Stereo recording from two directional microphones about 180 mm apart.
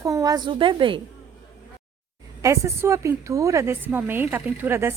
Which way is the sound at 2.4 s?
15° right (ahead or behind).